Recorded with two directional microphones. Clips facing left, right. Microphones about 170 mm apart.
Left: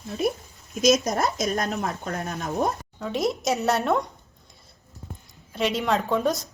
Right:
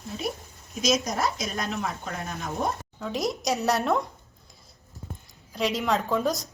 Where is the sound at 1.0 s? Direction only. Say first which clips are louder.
Left 4 dB; 45° left (ahead or behind).